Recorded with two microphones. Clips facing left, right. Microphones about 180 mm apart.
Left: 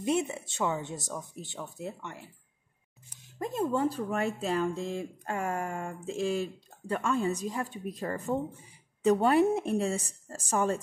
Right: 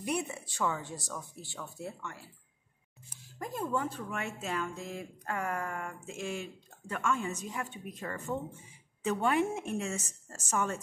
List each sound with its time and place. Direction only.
0.0 s speech: 25° left (ahead or behind)
3.3 s speech: 25° left (ahead or behind)